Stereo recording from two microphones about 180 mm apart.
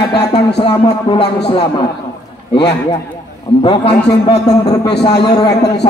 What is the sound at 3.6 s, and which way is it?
Speech, 30° left (ahead or behind).